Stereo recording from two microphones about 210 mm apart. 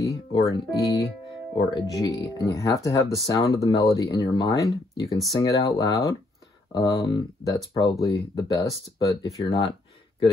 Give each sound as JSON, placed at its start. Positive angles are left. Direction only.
{"t": 0.0, "sound": "speech", "side_deg": 20}